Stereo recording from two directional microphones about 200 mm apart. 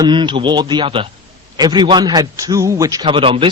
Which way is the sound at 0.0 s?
25° right (ahead or behind).